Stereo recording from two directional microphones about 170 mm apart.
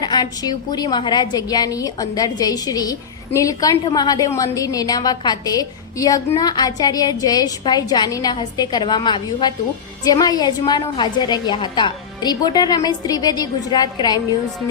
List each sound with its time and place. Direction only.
0.0 s a woman's voice: 25° left (ahead or behind)